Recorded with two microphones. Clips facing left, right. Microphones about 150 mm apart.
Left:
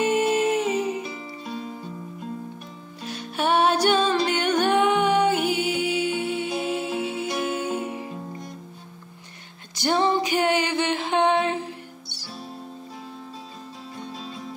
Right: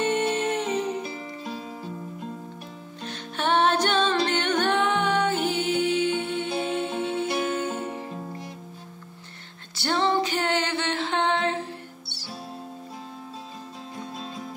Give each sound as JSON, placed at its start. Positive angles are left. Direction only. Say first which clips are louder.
{"t": 0.0, "sound": "music", "louder": "left 3 dB", "side_deg": 10}
{"t": 1.5, "sound": "music", "louder": "left 5 dB", "side_deg": -5}
{"t": 3.0, "sound": "music", "louder": "left 3 dB", "side_deg": 10}
{"t": 9.8, "sound": "music", "louder": "left 2 dB", "side_deg": 15}